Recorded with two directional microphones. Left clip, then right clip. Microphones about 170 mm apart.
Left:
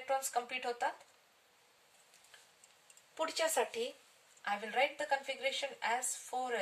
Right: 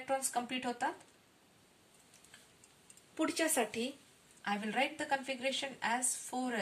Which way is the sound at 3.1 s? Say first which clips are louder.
Even; 45° left (ahead or behind).